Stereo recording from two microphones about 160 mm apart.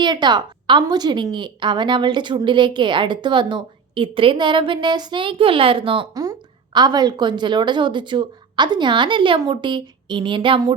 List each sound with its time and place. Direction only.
0.0 s a woman's voice: 30° right (ahead or behind)